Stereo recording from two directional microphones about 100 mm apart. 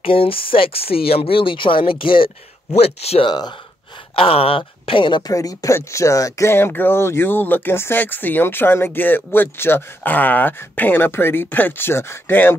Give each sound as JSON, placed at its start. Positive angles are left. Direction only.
{"t": 0.0, "sound": "speech", "side_deg": 65}
{"t": 2.7, "sound": "speech", "side_deg": 90}
{"t": 3.3, "sound": "speech", "side_deg": 45}
{"t": 4.1, "sound": "speech", "side_deg": 70}
{"t": 5.2, "sound": "speech", "side_deg": 35}